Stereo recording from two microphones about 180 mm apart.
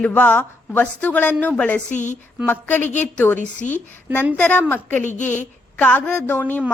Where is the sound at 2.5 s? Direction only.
10° left (ahead or behind).